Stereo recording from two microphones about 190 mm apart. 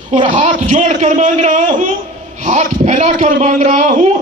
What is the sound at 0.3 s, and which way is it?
A man's voice, 40° right (ahead or behind).